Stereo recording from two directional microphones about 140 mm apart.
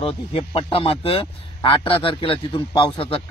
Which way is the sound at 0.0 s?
40° left (ahead or behind).